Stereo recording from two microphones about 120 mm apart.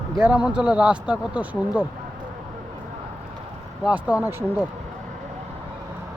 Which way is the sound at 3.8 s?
10° right (ahead or behind).